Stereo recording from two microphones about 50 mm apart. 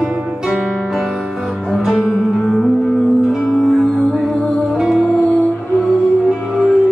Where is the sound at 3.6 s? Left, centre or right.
Centre.